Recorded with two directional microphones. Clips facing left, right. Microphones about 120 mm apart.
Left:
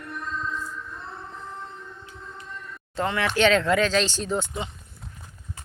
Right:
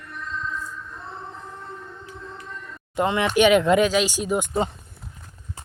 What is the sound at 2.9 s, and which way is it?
Speech, 20° right (ahead or behind).